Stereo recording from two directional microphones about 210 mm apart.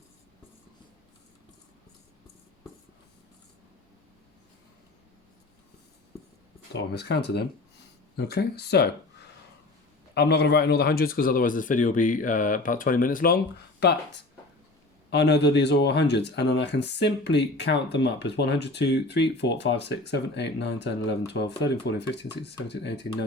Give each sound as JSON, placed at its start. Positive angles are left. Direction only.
{"t": 6.7, "sound": "speech", "side_deg": 55}
{"t": 10.2, "sound": "a man's voice", "side_deg": 55}
{"t": 15.1, "sound": "speech", "side_deg": 55}